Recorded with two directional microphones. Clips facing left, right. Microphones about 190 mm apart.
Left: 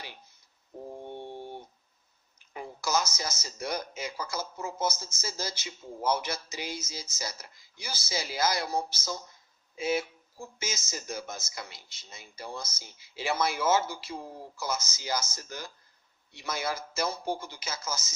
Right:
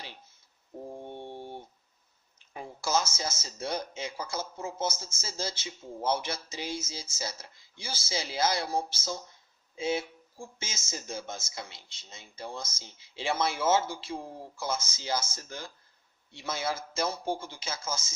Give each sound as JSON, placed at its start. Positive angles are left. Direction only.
{"t": 2.5, "sound": "speech", "side_deg": -25}